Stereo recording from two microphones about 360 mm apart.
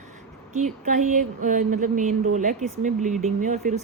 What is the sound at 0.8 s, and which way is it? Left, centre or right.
Speech, right.